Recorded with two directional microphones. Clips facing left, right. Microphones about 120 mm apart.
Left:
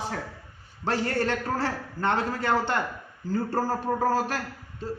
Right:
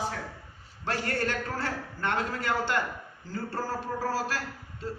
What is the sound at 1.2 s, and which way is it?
A man's voice, 25° left (ahead or behind).